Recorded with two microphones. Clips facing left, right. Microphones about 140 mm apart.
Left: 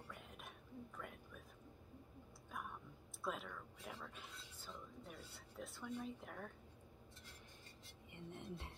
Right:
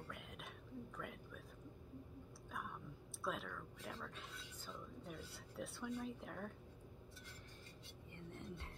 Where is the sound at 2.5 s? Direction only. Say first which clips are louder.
Right 1 dB; 5° left (ahead or behind).